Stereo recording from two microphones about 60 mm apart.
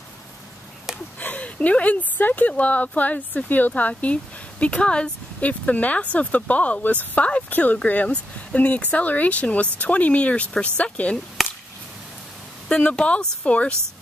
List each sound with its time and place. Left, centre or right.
1.2 s speech: left
11.4 s chop: centre
12.9 s speech: centre